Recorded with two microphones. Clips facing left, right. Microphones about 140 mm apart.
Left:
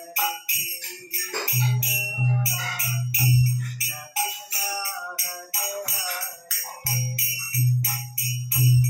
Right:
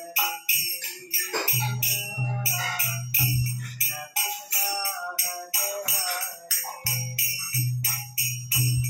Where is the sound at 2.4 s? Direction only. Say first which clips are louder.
Left 1 dB; centre (ahead or behind).